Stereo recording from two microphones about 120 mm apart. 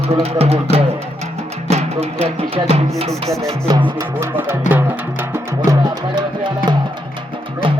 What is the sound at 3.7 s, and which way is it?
Speech, 40° right (ahead or behind).